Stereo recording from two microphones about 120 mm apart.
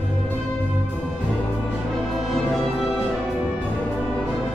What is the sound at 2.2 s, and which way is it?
Music, centre (ahead or behind).